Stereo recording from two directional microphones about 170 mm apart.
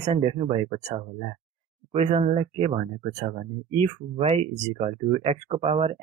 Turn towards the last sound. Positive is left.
turn(degrees=-40)  # may be behind; listen again after turning